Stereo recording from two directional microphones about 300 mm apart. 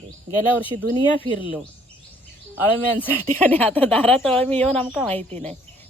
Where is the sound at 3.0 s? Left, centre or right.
Centre.